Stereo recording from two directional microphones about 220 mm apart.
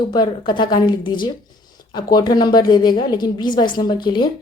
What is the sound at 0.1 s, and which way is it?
A woman's voice, 20° left (ahead or behind).